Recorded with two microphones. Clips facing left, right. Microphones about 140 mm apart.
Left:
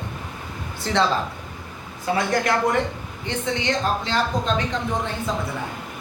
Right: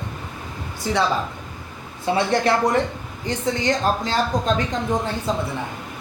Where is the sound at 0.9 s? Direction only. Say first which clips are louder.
Even; 10° right (ahead or behind).